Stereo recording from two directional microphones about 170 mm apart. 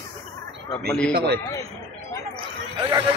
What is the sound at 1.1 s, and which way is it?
Speech, 75° right (ahead or behind).